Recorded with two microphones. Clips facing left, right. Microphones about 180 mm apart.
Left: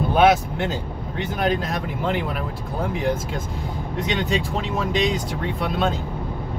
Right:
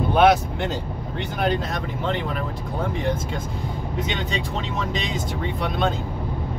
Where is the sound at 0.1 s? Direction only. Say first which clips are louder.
Even; centre (ahead or behind).